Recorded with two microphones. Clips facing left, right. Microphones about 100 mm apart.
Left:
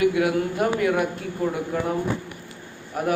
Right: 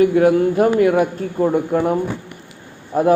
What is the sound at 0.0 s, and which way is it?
Speech, 35° right (ahead or behind).